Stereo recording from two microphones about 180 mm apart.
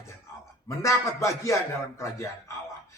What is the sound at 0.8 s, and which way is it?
Speech, 15° left (ahead or behind).